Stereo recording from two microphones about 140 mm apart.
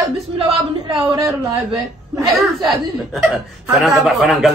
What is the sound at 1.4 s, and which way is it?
Speech, 30° right (ahead or behind).